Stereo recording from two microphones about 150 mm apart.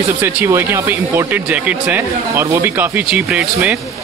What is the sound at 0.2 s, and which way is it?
Speech, 15° right (ahead or behind).